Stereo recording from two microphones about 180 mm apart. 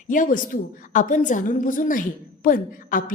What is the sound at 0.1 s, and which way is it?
A woman's voice, 50° left (ahead or behind).